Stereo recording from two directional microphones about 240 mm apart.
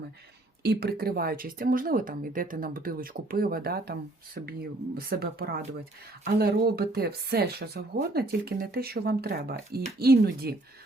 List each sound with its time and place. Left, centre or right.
0.6 s speech: right